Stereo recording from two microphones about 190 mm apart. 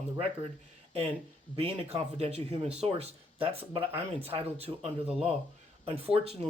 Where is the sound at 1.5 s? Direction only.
30° right (ahead or behind).